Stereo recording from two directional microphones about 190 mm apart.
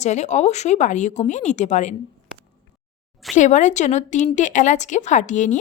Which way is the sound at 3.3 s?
40° left (ahead or behind).